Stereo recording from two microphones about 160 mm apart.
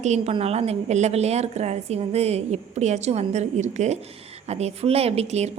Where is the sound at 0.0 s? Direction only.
45° right (ahead or behind).